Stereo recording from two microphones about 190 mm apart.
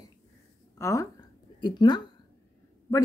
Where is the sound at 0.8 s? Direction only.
15° left (ahead or behind).